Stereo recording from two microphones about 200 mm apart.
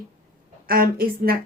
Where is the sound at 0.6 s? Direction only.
45° right (ahead or behind).